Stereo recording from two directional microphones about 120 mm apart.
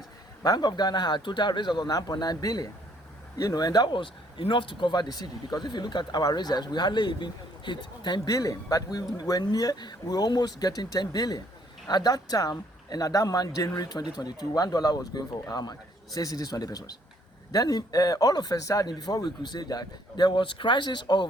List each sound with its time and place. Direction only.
0.4 s speech: 35° left (ahead or behind)